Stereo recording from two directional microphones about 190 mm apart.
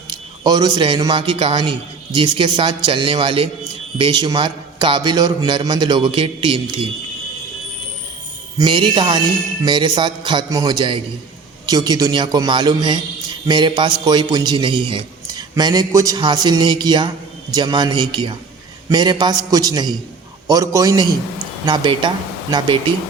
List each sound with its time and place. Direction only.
0.1 s a man's voice: 20° right (ahead or behind)
8.5 s a man's voice: 25° right (ahead or behind)